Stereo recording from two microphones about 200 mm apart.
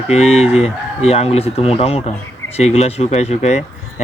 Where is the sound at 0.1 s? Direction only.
30° left (ahead or behind).